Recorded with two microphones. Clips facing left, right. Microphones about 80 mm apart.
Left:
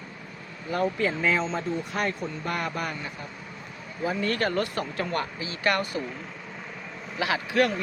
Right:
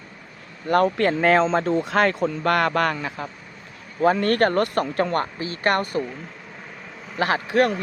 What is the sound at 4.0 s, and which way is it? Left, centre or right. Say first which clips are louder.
Speech: right 9 dB; right.